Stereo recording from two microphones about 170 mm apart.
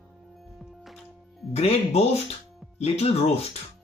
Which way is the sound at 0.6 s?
Centre (ahead or behind).